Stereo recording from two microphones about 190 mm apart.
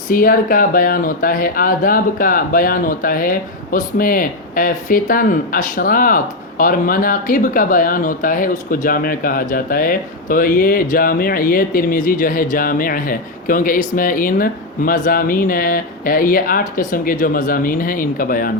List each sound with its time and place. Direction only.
0.1 s speech: 50° left (ahead or behind)